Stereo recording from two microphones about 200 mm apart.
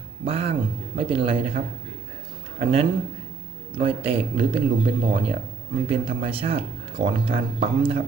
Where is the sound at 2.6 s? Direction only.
25° right (ahead or behind).